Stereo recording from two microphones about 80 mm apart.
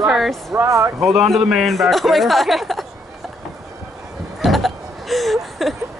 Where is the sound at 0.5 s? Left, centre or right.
Right.